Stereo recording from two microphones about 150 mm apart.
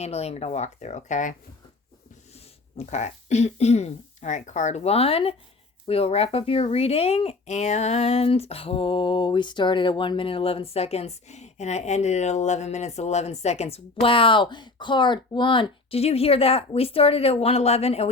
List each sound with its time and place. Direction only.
0.0 s speech: 45° left (ahead or behind)